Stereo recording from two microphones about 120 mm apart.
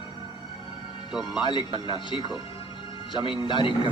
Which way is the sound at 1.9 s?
40° left (ahead or behind).